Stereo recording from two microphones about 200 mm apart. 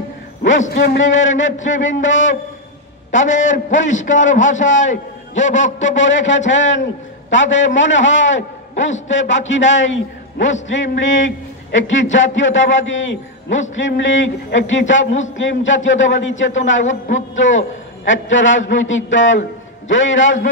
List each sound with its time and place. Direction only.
0.4 s a man's voice: 60° left (ahead or behind)
3.2 s a man's voice: 40° left (ahead or behind)
5.8 s a man's voice: 70° left (ahead or behind)